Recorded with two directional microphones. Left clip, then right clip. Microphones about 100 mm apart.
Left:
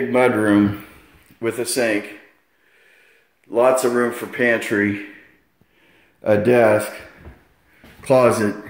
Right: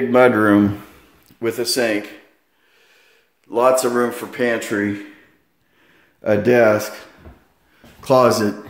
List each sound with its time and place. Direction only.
0.1 s speech: 70° right (ahead or behind)
1.4 s speech: 20° right (ahead or behind)
3.4 s speech: centre (ahead or behind)
6.2 s speech: 25° right (ahead or behind)
8.0 s speech: 20° right (ahead or behind)